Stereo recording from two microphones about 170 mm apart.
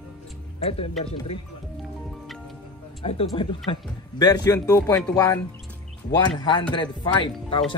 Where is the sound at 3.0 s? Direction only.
35° left (ahead or behind).